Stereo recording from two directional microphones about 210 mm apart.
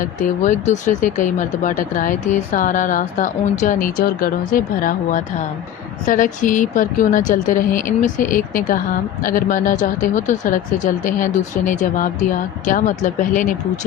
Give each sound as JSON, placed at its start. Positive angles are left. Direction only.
{"t": 0.4, "sound": "speech", "side_deg": 35}